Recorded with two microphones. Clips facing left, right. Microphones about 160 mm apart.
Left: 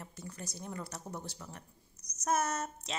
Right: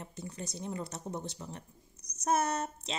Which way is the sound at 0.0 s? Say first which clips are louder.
Right 3 dB; 25° right (ahead or behind).